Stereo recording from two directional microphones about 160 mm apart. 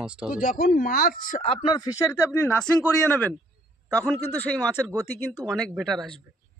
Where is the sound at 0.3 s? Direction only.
60° left (ahead or behind).